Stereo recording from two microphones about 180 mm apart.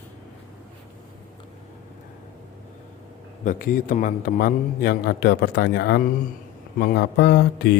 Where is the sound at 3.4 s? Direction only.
50° left (ahead or behind); by 7.7 s 70° left (ahead or behind).